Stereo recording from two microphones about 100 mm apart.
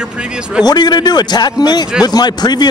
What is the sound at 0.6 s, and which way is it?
A man's voice, 45° left (ahead or behind).